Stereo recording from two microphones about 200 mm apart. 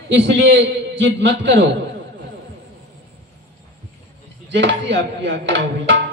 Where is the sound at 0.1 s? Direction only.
60° right (ahead or behind).